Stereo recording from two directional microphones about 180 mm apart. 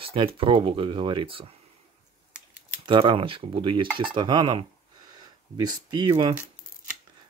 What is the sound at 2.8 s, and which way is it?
Speech, 30° right (ahead or behind).